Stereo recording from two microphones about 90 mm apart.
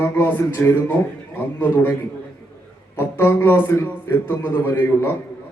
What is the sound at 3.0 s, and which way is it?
Speech, 25° left (ahead or behind).